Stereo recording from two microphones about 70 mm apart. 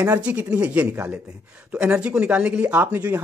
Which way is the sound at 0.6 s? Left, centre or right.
Right.